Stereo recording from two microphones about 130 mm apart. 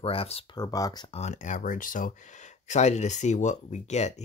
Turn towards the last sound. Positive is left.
turn(degrees=60)  # may be behind; listen again after turning